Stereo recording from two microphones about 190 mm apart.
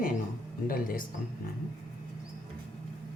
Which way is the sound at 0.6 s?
50° left (ahead or behind).